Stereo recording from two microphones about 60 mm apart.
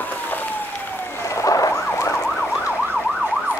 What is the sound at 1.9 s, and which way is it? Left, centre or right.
Emergency vehicle, left.